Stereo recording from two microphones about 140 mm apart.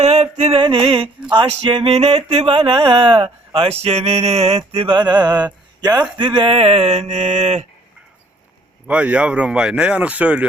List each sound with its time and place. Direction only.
0.0 s mantra: 50° right (ahead or behind)
0.6 s a sound: 40° right (ahead or behind)
5.8 s speech: 30° right (ahead or behind); by 7.7 s 55° right (ahead or behind)
8.9 s speech: 10° right (ahead or behind)